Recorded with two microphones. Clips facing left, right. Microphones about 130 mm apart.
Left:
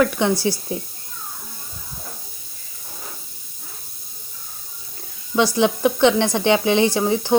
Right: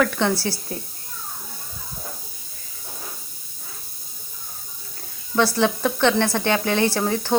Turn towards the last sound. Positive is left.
turn(degrees=15)  # may be behind; listen again after turning